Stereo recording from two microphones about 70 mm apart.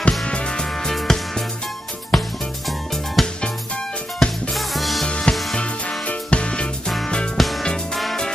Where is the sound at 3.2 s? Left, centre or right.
Centre.